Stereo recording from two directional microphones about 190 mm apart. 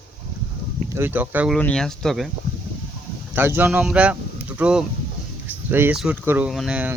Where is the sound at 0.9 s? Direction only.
10° right (ahead or behind).